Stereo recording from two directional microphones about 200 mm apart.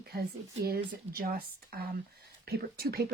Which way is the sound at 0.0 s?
50° right (ahead or behind).